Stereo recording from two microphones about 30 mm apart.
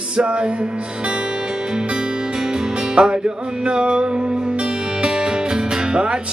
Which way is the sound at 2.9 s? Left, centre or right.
Right.